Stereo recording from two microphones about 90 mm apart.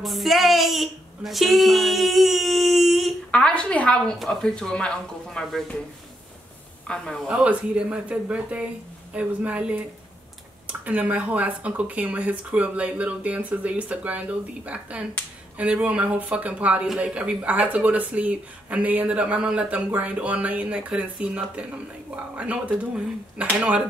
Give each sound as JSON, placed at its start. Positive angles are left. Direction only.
{"t": 0.0, "sound": "speech", "side_deg": 0}
{"t": 3.3, "sound": "a woman's voice", "side_deg": 10}
{"t": 6.9, "sound": "a woman's voice", "side_deg": 10}
{"t": 7.2, "sound": "speech", "side_deg": -10}
{"t": 16.8, "sound": "speech", "side_deg": -5}